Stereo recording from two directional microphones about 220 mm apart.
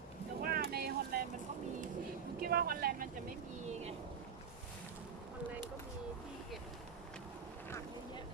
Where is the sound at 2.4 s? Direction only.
45° right (ahead or behind).